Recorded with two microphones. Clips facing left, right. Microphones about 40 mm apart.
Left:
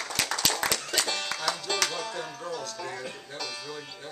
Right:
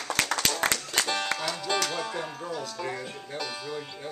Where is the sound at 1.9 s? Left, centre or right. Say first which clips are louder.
Right 2 dB; centre.